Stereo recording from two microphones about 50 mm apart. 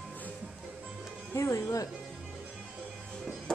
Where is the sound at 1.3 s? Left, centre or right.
Left.